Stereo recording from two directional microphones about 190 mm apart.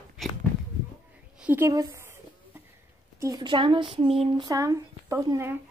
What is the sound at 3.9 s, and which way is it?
Female singing, 30° right (ahead or behind).